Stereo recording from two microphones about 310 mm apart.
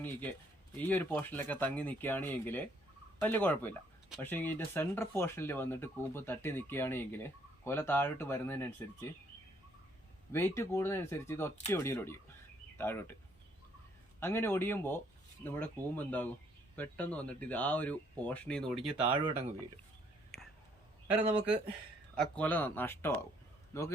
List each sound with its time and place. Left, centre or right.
0.0 s speech: centre
10.3 s speech: centre
14.2 s speech: centre
21.1 s speech: centre